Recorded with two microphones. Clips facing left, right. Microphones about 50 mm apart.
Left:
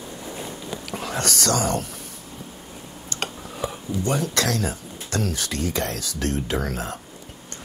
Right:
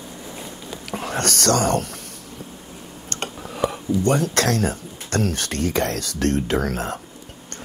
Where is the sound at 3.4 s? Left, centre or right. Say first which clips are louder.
Right 6 dB; right.